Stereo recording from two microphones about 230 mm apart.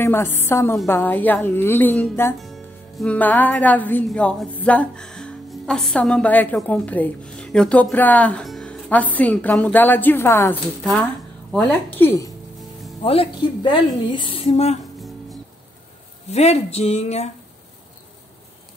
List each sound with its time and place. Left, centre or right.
0.0 s a woman's voice: centre
13.0 s a woman's voice: left
16.3 s a woman's voice: left